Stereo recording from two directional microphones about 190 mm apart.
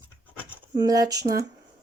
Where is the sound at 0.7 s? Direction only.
20° right (ahead or behind).